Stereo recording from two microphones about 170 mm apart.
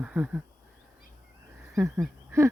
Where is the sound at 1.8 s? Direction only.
15° right (ahead or behind).